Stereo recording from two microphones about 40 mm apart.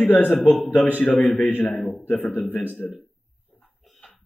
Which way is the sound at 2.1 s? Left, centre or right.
Left.